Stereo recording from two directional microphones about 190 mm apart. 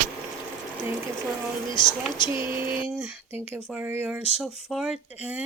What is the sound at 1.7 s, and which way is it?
Speech, 25° left (ahead or behind).